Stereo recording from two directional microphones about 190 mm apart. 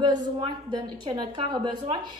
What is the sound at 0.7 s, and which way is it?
A woman's voice, 20° right (ahead or behind).